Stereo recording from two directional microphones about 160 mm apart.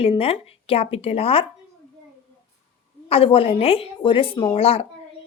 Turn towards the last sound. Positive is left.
turn(degrees=35)  # may be behind; listen again after turning